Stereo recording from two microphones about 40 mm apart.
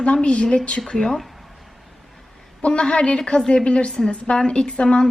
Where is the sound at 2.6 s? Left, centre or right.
Left.